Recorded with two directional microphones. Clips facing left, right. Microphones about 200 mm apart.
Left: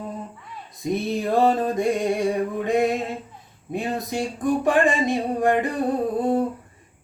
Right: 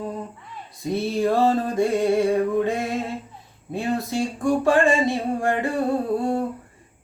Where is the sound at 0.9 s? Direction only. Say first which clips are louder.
Right 1 dB; 20° left (ahead or behind).